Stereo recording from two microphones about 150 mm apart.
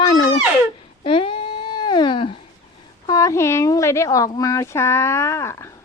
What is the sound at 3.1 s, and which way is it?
Speech, 20° left (ahead or behind).